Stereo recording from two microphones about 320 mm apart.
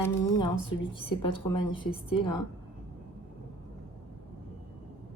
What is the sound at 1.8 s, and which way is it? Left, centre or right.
Speech, centre.